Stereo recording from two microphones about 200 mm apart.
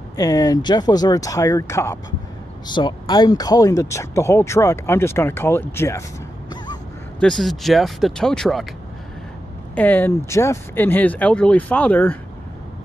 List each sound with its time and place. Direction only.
0.1 s speech: 15° left (ahead or behind)
7.2 s speech: 5° left (ahead or behind)
9.8 s speech: 10° left (ahead or behind)